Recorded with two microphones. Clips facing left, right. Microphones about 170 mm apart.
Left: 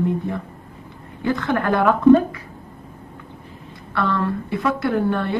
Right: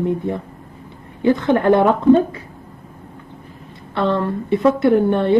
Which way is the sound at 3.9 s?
20° right (ahead or behind).